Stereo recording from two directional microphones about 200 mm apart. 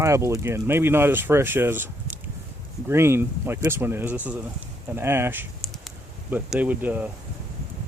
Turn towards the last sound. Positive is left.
turn(degrees=-10)  # may be behind; listen again after turning